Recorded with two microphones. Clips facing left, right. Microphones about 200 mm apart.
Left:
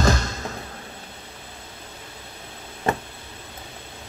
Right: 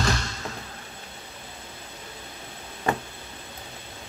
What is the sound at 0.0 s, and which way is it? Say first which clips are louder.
Basketball bounce: left 6 dB; 45° left (ahead or behind).